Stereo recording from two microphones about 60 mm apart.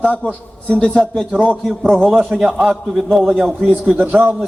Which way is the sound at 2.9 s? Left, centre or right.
Centre.